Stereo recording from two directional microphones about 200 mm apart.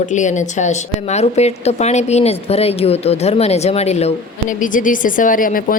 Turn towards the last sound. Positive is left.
turn(degrees=45)  # may be behind; listen again after turning